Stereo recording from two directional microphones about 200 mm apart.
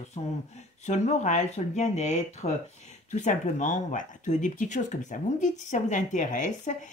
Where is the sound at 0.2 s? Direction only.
30° left (ahead or behind).